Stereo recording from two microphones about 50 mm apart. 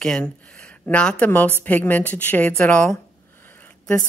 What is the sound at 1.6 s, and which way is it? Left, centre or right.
A woman's voice, left.